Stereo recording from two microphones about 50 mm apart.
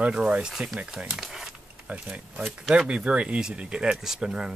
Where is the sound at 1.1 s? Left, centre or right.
Centre.